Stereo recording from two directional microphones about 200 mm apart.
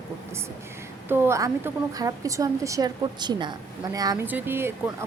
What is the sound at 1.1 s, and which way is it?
A woman's voice, 10° right (ahead or behind).